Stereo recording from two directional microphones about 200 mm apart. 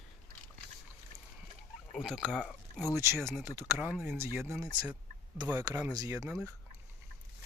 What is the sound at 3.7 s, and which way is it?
Speech, 10° right (ahead or behind).